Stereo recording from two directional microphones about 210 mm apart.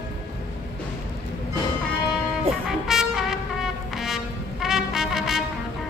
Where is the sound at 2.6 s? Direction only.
Centre (ahead or behind).